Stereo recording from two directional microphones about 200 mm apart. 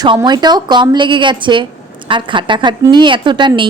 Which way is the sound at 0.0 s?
20° right (ahead or behind).